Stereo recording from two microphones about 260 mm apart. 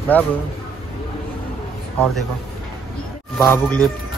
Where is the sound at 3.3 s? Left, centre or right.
Centre.